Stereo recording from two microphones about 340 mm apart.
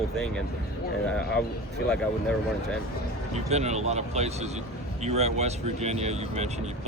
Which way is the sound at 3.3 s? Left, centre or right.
Centre.